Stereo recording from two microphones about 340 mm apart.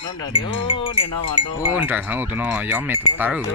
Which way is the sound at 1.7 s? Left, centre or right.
Centre.